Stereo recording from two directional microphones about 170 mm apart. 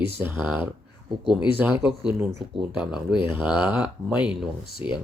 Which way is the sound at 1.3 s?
5° right (ahead or behind).